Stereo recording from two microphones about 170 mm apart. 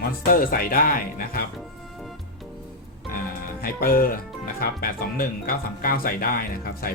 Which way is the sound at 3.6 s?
60° left (ahead or behind).